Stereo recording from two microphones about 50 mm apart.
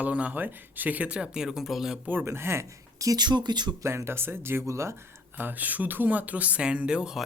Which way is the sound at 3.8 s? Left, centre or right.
Right.